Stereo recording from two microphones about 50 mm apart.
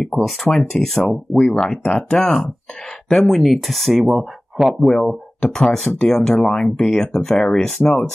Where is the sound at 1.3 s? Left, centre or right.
Left.